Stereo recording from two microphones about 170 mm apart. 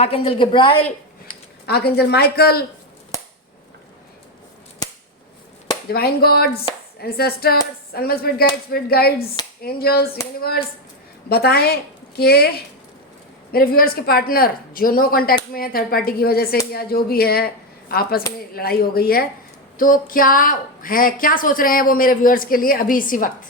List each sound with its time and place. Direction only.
0.0 s a woman's voice: 35° left (ahead or behind)
1.6 s speech: 70° left (ahead or behind)
4.8 s scissors: 20° left (ahead or behind)
5.9 s a woman's voice: 65° left (ahead or behind)
11.3 s a woman's voice: 65° left (ahead or behind)
13.5 s a woman's voice: 60° left (ahead or behind)